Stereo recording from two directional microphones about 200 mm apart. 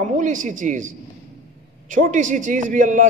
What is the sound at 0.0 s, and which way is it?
Speech, 40° right (ahead or behind).